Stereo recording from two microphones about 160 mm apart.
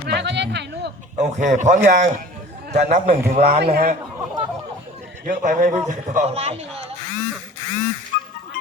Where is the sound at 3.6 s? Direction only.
85° right.